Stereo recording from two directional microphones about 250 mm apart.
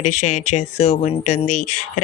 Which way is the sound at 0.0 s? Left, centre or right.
Left.